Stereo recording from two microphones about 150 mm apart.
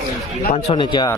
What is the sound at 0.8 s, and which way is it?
Speech, 30° left (ahead or behind).